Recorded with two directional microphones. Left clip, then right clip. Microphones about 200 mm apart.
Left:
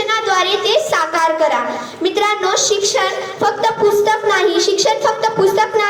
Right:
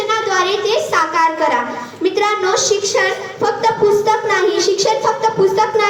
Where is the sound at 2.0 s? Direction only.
40° left (ahead or behind).